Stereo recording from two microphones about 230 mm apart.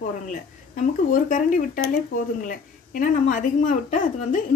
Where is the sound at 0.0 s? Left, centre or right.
Left.